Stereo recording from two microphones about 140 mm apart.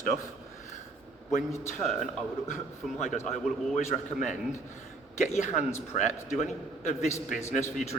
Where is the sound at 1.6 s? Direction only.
55° left (ahead or behind).